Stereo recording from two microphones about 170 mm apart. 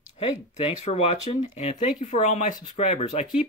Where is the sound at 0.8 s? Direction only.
35° left (ahead or behind).